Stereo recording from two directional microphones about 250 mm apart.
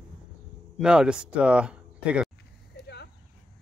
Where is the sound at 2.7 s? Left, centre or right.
Left.